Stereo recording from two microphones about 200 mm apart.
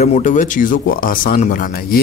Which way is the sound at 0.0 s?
35° left (ahead or behind).